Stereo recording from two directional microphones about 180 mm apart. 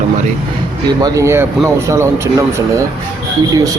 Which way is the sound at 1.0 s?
15° right (ahead or behind).